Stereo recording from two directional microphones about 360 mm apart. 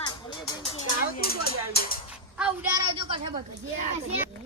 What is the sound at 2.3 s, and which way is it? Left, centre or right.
Speech, centre.